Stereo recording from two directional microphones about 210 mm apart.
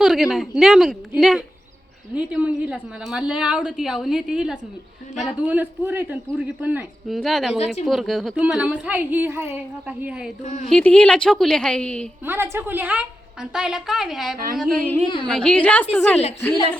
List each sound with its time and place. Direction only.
0.0 s a woman's voice: centre (ahead or behind)
10.4 s speech: 35° left (ahead or behind)
10.7 s a woman's voice: 5° left (ahead or behind)
12.2 s a woman's voice: 10° right (ahead or behind); by 16.2 s 5° left (ahead or behind)